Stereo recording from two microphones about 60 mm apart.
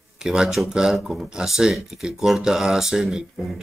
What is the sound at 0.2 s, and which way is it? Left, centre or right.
A man's voice, centre.